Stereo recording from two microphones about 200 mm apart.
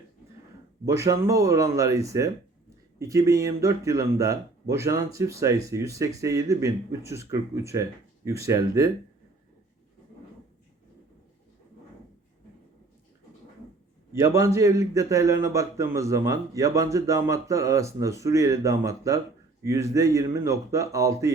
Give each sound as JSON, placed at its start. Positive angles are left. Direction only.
{"t": 0.9, "sound": "speech", "side_deg": -15}
{"t": 14.2, "sound": "speech", "side_deg": -15}